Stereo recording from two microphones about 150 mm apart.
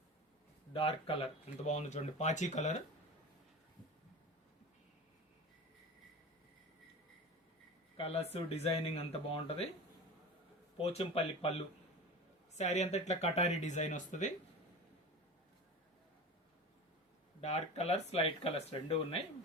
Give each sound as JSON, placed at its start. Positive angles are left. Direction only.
{"t": 0.7, "sound": "speech", "side_deg": 40}
{"t": 7.9, "sound": "speech", "side_deg": 45}
{"t": 10.8, "sound": "speech", "side_deg": 40}
{"t": 17.4, "sound": "speech", "side_deg": 45}